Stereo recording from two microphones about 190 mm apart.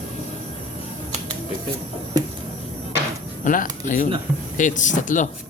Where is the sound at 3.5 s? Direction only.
45° left (ahead or behind).